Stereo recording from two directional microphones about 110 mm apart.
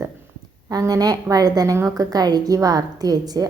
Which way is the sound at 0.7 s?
35° right (ahead or behind).